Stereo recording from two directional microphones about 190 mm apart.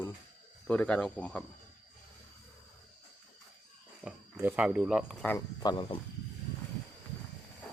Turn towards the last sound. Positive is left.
turn(degrees=20)  # may be behind; listen again after turning